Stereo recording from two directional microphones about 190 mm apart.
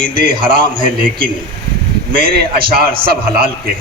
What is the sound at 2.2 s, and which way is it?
Speech, 50° right (ahead or behind).